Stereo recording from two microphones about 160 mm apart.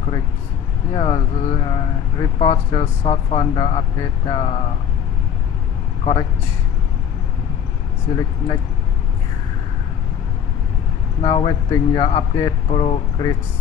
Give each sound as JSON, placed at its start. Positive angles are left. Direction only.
{"t": 0.9, "sound": "speech", "side_deg": 30}
{"t": 8.1, "sound": "speech", "side_deg": 25}
{"t": 11.1, "sound": "speech", "side_deg": 30}